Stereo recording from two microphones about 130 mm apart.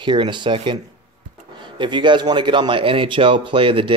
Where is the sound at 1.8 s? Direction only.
35° right (ahead or behind).